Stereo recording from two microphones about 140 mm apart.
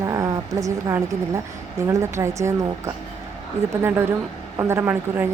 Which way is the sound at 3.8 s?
15° right (ahead or behind).